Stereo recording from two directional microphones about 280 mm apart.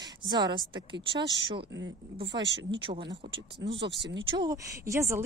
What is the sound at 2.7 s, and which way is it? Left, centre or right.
Speech, centre.